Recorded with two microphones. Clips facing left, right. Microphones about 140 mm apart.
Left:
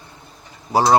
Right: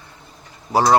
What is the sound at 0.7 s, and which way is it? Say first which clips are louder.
Bee: even; 15° left (ahead or behind).